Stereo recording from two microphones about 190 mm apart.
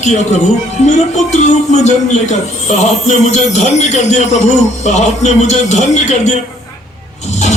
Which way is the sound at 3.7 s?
35° left (ahead or behind).